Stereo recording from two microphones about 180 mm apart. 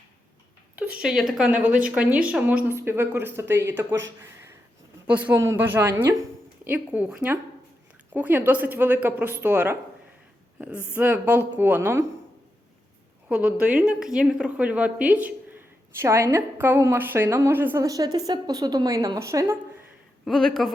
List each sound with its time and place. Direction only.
0.8 s a woman's voice: 5° right (ahead or behind)
5.0 s a woman's voice: 10° right (ahead or behind)
13.2 s a woman's voice: 5° right (ahead or behind)
20.2 s speech: 5° left (ahead or behind)